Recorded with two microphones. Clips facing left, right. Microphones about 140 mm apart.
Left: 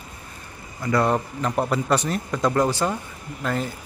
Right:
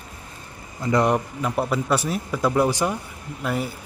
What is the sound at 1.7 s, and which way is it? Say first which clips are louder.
Speech: left 1 dB; 5° right (ahead or behind).